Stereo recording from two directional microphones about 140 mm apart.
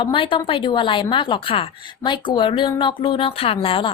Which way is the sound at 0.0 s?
40° left (ahead or behind).